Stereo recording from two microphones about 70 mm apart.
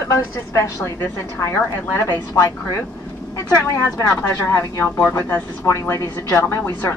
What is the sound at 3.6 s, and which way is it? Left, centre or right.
A woman's voice, left.